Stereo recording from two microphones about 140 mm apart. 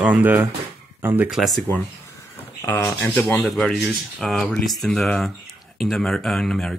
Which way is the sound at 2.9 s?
15° left (ahead or behind).